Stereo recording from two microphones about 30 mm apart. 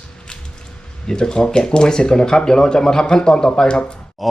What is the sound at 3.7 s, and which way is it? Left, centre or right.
Speech, left.